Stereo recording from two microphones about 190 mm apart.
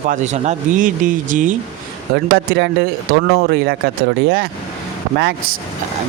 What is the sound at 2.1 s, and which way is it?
Speech, 60° right (ahead or behind).